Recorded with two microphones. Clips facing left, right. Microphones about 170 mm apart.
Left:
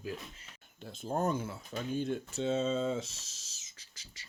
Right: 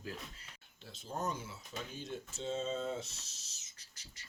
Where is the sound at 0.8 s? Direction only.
50° left (ahead or behind); by 4.2 s 90° left.